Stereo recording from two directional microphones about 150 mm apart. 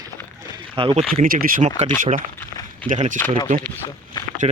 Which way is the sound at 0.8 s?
35° right (ahead or behind).